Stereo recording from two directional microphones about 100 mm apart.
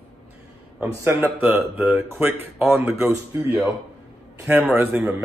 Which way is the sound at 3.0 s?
5° right (ahead or behind).